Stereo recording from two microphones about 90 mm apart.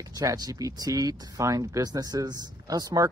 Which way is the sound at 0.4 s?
45° right (ahead or behind).